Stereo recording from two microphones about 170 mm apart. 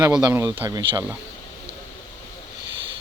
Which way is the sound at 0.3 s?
15° right (ahead or behind).